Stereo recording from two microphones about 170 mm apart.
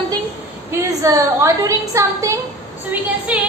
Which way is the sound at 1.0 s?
20° right (ahead or behind).